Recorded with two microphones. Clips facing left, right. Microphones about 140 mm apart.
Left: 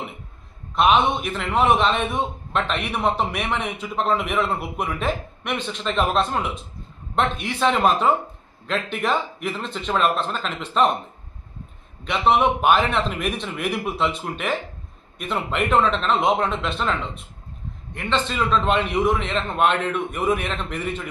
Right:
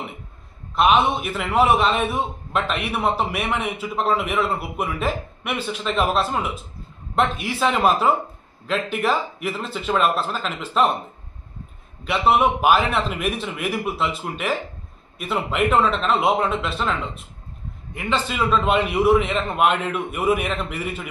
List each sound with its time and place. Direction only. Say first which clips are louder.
0.7 s a man's voice: even; centre (ahead or behind)
12.0 s a man's voice: right 1 dB; 5° right (ahead or behind)